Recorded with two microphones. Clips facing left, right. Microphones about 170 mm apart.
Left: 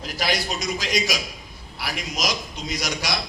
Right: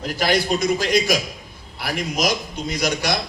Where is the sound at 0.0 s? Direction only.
50° right (ahead or behind).